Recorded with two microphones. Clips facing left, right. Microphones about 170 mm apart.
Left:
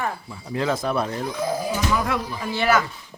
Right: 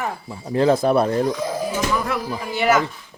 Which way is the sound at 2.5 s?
20° right (ahead or behind).